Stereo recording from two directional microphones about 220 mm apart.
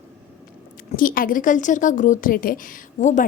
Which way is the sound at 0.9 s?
40° left (ahead or behind).